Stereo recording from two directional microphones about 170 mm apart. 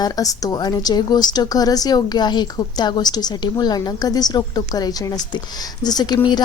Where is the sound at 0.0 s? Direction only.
20° left (ahead or behind).